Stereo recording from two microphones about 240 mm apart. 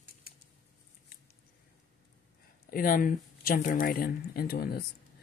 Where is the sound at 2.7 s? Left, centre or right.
Left.